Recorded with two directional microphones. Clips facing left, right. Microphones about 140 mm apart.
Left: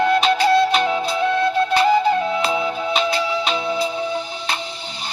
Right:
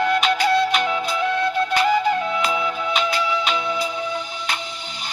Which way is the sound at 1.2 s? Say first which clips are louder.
Left 3 dB; 30° left (ahead or behind).